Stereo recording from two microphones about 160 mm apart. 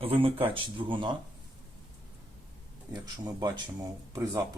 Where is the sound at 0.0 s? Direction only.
35° right (ahead or behind).